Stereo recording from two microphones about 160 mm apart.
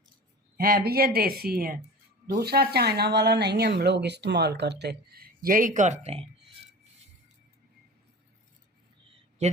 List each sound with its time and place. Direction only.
0.5 s speech: 70° right (ahead or behind)
2.4 s speech: 85° right; by 6.2 s 40° right (ahead or behind)